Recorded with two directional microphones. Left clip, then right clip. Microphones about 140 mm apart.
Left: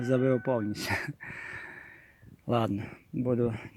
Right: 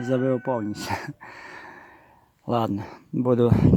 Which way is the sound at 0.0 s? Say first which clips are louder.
Right 3 dB; 5° right (ahead or behind).